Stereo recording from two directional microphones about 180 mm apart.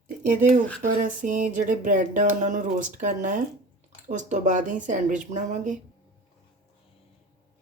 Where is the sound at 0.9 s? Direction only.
50° right (ahead or behind).